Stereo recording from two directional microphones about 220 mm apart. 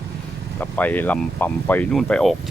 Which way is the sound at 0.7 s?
5° left (ahead or behind).